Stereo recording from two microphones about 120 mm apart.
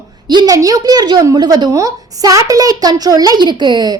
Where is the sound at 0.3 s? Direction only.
35° right (ahead or behind).